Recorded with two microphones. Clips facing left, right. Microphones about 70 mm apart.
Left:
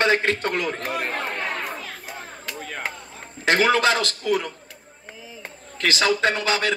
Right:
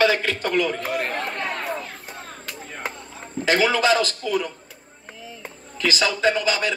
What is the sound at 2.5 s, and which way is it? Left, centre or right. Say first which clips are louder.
Chop: left 3 dB; left.